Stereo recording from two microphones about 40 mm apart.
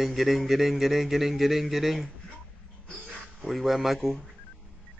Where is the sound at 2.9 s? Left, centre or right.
Left.